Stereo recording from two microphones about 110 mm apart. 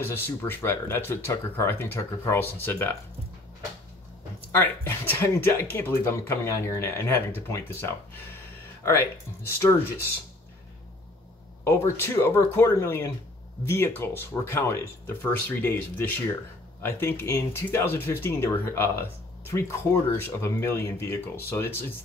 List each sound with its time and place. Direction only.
0.0 s speech: 20° left (ahead or behind)
4.5 s speech: 20° left (ahead or behind)
9.6 s speech: 25° left (ahead or behind)
11.6 s speech: 25° left (ahead or behind)